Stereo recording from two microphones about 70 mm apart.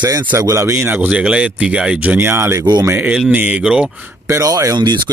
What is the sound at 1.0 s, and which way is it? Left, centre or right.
Speech, centre.